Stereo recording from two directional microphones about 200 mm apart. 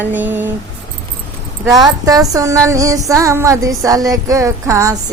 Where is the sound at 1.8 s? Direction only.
20° right (ahead or behind).